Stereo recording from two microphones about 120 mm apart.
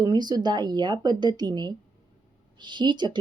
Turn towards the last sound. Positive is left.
turn(degrees=-40)  # may be behind; listen again after turning